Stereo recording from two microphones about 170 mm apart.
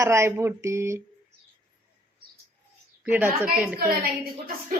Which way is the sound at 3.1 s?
10° right (ahead or behind).